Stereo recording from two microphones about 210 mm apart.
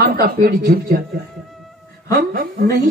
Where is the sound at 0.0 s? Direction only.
45° right (ahead or behind).